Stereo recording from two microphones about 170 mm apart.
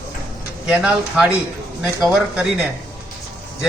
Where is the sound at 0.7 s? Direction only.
5° right (ahead or behind).